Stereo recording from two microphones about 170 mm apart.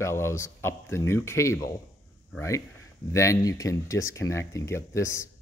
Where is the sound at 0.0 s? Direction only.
15° left (ahead or behind).